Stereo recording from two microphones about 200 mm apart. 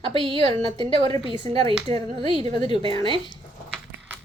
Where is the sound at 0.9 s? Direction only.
20° left (ahead or behind).